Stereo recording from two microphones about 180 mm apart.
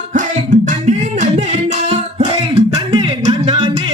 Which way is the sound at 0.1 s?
45° right (ahead or behind).